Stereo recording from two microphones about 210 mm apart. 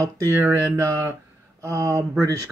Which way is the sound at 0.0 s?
15° right (ahead or behind).